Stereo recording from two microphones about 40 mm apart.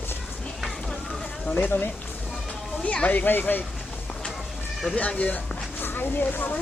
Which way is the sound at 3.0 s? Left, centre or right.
Left.